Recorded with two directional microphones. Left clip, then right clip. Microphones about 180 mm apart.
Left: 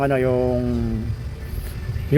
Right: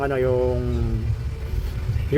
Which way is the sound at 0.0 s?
40° left (ahead or behind).